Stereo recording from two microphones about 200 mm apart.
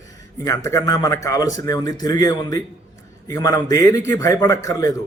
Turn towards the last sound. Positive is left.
turn(degrees=15)  # may be behind; listen again after turning